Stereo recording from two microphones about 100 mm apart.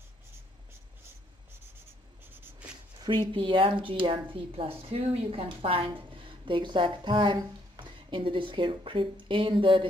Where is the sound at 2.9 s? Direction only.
50° right (ahead or behind); by 5.5 s 80° right.